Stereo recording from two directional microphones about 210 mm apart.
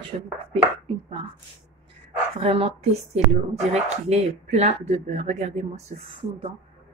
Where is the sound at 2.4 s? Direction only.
30° right (ahead or behind).